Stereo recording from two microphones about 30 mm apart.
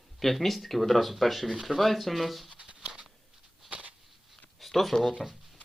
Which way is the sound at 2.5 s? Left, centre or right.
Right.